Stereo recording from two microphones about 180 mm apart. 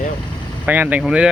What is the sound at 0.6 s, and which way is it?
Speech, 10° right (ahead or behind).